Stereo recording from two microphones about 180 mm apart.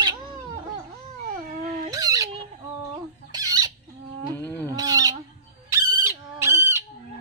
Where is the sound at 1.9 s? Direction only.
20° right (ahead or behind).